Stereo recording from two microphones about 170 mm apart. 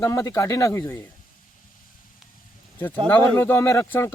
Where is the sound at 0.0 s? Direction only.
15° left (ahead or behind).